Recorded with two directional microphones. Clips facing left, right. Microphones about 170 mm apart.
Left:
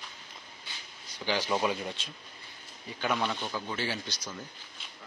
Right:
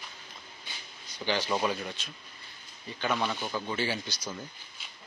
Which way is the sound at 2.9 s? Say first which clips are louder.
Even; 5° left (ahead or behind).